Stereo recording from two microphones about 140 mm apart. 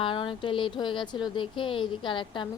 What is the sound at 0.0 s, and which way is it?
Speech, 40° left (ahead or behind).